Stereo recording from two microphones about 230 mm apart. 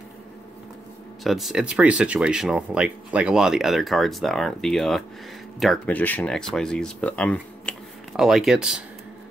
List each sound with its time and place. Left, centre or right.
1.2 s speech: centre